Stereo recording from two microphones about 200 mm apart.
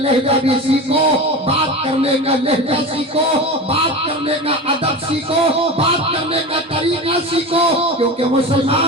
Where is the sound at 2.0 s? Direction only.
30° right (ahead or behind).